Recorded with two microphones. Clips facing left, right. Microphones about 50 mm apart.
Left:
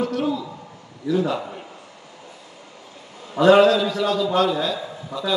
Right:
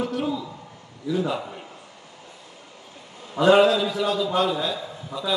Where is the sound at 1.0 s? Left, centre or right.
Centre.